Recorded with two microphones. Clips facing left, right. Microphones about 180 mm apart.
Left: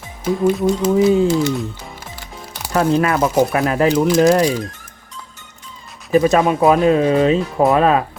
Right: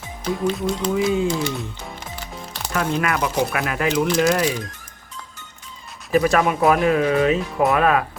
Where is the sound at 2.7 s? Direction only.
35° left (ahead or behind).